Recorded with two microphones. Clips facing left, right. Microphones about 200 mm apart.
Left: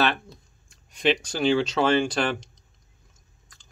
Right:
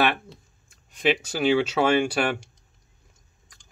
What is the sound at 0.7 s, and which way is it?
Speech, centre (ahead or behind).